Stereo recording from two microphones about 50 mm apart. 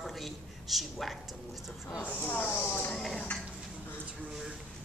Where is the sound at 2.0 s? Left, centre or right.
Left.